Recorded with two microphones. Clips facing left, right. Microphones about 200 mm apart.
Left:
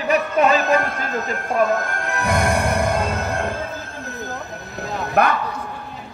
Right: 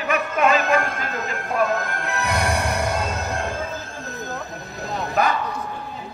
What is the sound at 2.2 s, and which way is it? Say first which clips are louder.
Music: left 4 dB; 50° left (ahead or behind).